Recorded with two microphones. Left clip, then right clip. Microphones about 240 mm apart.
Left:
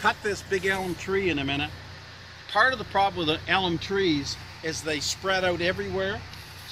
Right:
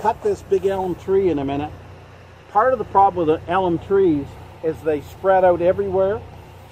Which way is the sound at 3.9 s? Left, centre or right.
Left.